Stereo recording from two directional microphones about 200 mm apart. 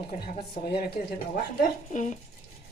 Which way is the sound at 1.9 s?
35° left (ahead or behind).